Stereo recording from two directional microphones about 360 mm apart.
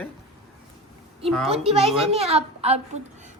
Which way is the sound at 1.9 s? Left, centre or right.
Centre.